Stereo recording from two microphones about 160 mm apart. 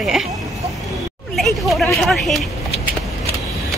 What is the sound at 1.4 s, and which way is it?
Speech, centre (ahead or behind).